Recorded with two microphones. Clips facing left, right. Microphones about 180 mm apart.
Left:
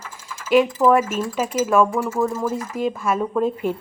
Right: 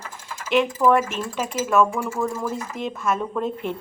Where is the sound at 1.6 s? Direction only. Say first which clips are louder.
Left 2 dB; 5° left (ahead or behind).